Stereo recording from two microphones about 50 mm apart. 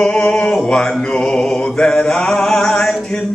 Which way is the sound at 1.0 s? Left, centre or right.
Centre.